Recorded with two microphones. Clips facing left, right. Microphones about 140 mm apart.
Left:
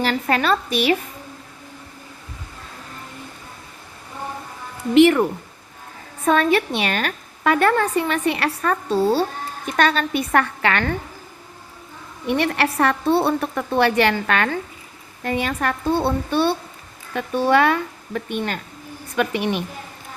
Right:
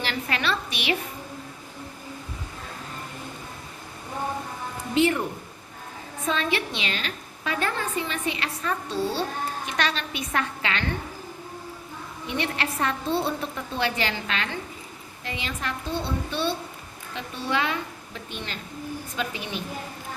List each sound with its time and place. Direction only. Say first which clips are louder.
0.0 s a woman's voice: left 8 dB; 45° left (ahead or behind)
4.9 s speech: left 9 dB; 75° left (ahead or behind)
6.2 s a woman's voice: left 9 dB; 55° left (ahead or behind)
12.3 s a woman's voice: left 8 dB; 60° left (ahead or behind)